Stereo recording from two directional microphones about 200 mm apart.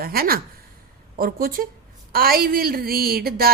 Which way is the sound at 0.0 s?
50° right (ahead or behind).